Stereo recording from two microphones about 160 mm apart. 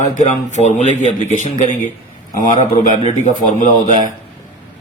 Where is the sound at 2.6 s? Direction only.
50° left (ahead or behind).